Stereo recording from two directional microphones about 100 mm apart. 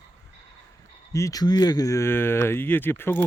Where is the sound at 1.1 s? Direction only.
30° left (ahead or behind).